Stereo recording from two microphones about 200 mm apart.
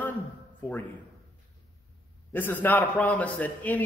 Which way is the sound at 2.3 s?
10° left (ahead or behind).